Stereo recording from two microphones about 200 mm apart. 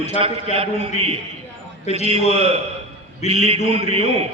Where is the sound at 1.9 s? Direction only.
35° left (ahead or behind).